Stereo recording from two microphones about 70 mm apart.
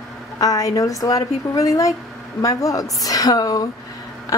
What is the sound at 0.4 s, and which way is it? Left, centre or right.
A woman's voice, left.